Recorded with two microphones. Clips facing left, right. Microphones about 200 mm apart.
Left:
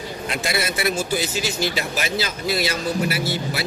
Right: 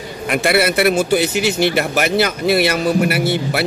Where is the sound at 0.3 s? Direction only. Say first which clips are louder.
Right 10 dB; 65° right (ahead or behind).